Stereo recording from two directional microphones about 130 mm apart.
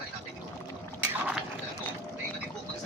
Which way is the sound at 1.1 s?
10° right (ahead or behind).